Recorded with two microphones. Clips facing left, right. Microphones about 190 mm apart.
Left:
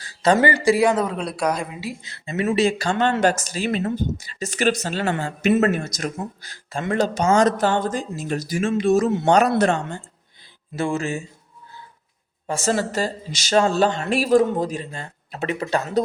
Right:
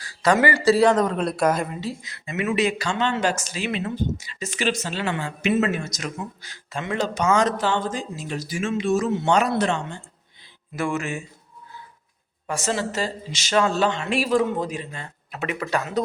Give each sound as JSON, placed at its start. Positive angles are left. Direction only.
{"t": 0.0, "sound": "a sound", "side_deg": 25}
{"t": 0.6, "sound": "speech", "side_deg": 10}
{"t": 2.0, "sound": "speech", "side_deg": 30}
{"t": 2.9, "sound": "speech", "side_deg": 50}
{"t": 10.8, "sound": "speech", "side_deg": 30}
{"t": 12.6, "sound": "speech", "side_deg": 45}